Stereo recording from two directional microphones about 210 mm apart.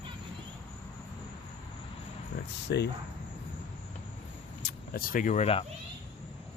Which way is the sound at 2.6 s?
55° left (ahead or behind).